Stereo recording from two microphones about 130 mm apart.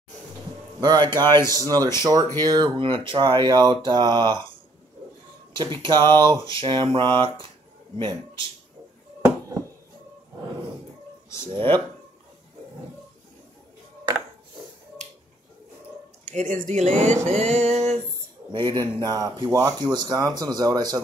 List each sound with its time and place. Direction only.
0.7 s speech: 35° right (ahead or behind)
5.8 s speech: 35° right (ahead or behind)
11.2 s a sound: 20° left (ahead or behind)
11.5 s speech: 40° right (ahead or behind)
16.3 s speech: 70° right (ahead or behind)
18.5 s speech: 35° right (ahead or behind)